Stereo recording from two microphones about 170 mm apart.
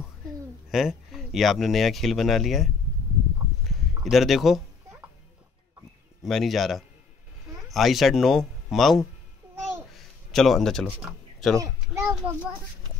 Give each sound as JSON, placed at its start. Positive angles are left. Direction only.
{"t": 0.7, "sound": "speech", "side_deg": 0}
{"t": 3.6, "sound": "a sound", "side_deg": 0}
{"t": 6.2, "sound": "speech", "side_deg": 0}
{"t": 9.7, "sound": "babbling", "side_deg": 0}
{"t": 11.1, "sound": "a sound", "side_deg": 0}
{"t": 11.6, "sound": "a child's voice", "side_deg": -15}